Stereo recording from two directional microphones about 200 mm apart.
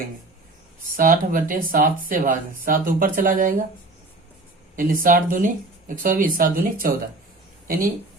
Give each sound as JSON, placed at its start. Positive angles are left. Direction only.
{"t": 0.9, "sound": "speech", "side_deg": -45}
{"t": 4.8, "sound": "speech", "side_deg": -45}